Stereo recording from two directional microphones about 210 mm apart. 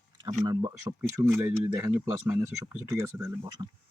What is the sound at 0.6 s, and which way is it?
Speech, 10° right (ahead or behind).